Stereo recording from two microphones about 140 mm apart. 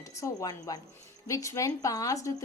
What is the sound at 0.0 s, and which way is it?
Speech, 25° left (ahead or behind).